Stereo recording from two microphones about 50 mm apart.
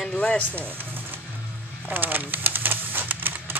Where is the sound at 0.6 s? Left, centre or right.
Right.